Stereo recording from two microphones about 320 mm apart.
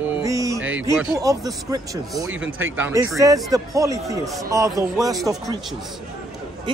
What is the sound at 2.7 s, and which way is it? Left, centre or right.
A man's voice, centre.